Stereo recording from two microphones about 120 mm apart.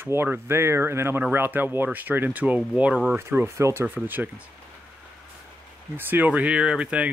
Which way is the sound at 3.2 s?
20° right (ahead or behind).